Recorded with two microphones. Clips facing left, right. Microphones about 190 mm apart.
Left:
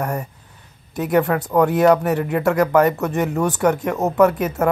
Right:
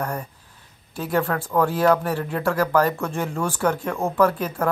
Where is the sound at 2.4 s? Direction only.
20° left (ahead or behind).